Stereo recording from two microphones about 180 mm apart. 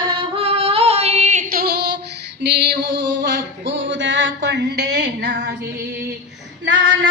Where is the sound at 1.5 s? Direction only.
55° right (ahead or behind).